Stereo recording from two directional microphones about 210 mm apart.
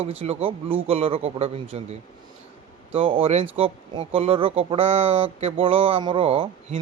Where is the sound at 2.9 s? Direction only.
25° right (ahead or behind).